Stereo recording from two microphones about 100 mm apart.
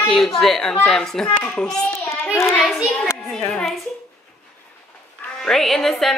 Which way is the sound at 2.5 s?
Centre (ahead or behind).